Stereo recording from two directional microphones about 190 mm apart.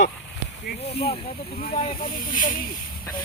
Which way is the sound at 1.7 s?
35° left (ahead or behind).